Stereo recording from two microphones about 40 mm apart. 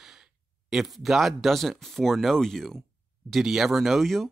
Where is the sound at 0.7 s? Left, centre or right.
Centre.